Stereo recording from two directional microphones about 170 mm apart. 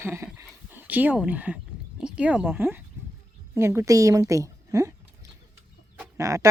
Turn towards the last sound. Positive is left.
turn(degrees=-20)  # may be behind; listen again after turning